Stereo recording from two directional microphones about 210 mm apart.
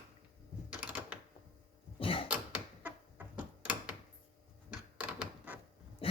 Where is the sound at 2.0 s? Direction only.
25° left (ahead or behind).